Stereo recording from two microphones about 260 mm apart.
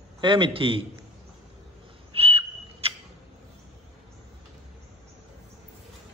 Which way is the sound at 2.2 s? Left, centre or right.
Right.